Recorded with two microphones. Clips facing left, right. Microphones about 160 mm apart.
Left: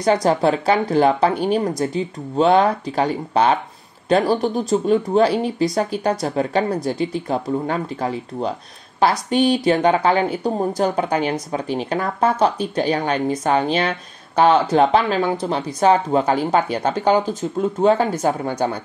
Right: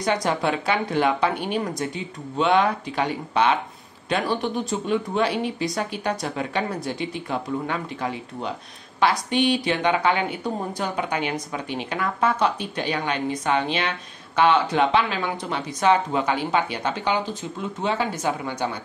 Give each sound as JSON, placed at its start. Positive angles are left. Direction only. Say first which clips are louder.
{"t": 0.0, "sound": "speech", "louder": "left 7 dB", "side_deg": 35}